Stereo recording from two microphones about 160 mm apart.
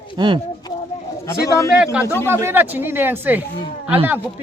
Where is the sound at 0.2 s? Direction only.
30° right (ahead or behind).